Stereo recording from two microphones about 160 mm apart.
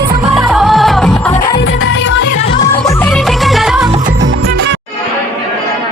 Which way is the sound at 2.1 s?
90° left.